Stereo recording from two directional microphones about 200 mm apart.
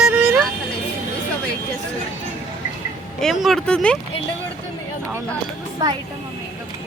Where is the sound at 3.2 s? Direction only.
Centre (ahead or behind).